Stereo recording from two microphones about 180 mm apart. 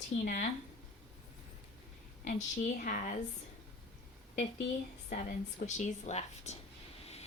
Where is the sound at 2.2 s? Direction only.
45° left (ahead or behind).